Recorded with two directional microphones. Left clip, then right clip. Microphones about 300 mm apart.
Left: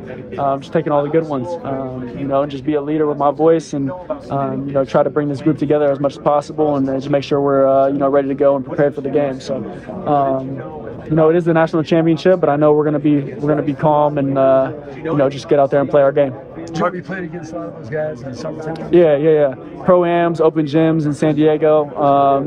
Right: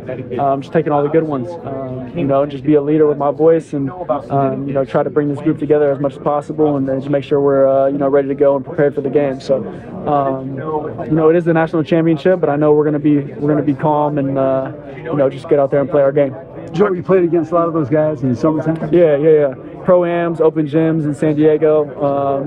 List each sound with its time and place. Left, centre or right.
0.4 s speech: centre
17.1 s a man's voice: centre
18.9 s speech: centre